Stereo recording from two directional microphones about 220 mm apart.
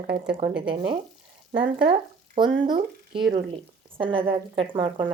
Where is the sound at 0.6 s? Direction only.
20° right (ahead or behind).